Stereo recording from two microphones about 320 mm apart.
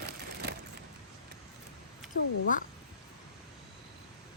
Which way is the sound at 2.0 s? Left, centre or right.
Centre.